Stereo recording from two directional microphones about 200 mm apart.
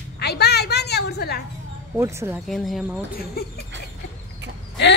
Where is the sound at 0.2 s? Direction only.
55° left (ahead or behind).